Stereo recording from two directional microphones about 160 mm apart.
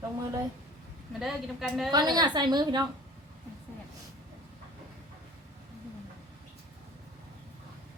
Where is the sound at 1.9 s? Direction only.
25° right (ahead or behind).